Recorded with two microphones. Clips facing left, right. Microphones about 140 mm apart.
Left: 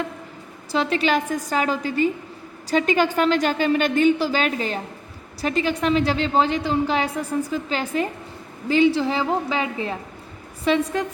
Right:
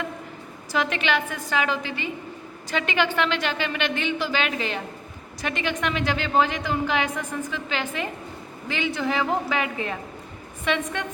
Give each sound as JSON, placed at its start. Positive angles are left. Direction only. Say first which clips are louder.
{"t": 0.7, "sound": "a woman's voice", "louder": "left 4 dB", "side_deg": 30}